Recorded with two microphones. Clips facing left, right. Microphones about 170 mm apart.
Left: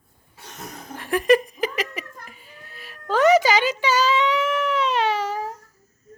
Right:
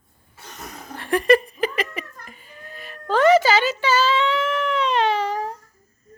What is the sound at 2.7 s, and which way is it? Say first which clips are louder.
Music: right 2 dB; 5° left (ahead or behind).